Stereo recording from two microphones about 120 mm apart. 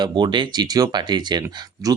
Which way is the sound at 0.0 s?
40° right (ahead or behind).